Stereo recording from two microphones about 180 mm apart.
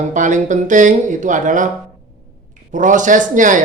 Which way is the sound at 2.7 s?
45° right (ahead or behind).